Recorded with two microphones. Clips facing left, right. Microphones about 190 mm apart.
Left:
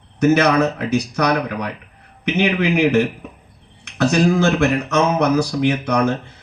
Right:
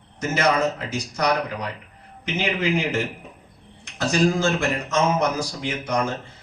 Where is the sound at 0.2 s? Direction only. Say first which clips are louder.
Left 7 dB; 65° left (ahead or behind).